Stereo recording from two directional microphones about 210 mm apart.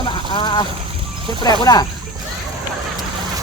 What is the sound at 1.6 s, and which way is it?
Speech, 15° left (ahead or behind).